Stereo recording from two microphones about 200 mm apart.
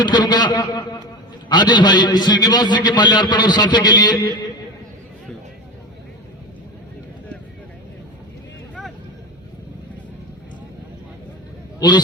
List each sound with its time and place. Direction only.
0.0 s a man's voice: 20° left (ahead or behind)
11.8 s a man's voice: 20° left (ahead or behind)